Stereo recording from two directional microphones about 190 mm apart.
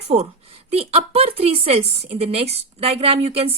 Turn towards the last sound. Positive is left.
turn(degrees=-30)  # may be behind; listen again after turning